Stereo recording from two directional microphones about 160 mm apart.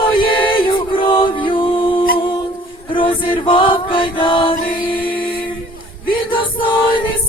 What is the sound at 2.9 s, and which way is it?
Chant, 30° left (ahead or behind).